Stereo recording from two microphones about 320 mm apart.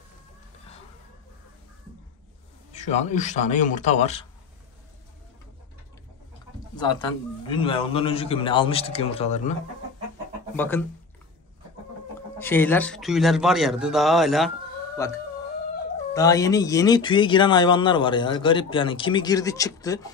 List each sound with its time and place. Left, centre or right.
2.8 s a man's voice: left
6.8 s speech: centre
10.5 s speech: centre
12.4 s speech: centre
15.0 s speech: centre